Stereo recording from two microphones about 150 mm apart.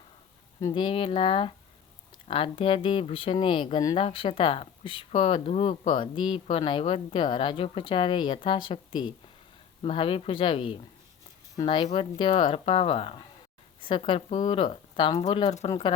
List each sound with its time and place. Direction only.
0.7 s speech: 35° left (ahead or behind)
15.4 s speech: 50° left (ahead or behind)